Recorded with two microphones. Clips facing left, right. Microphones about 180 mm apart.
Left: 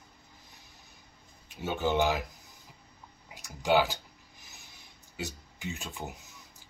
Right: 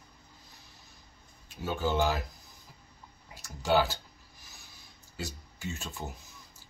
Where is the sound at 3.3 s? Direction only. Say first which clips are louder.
Left 1 dB; 15° left (ahead or behind).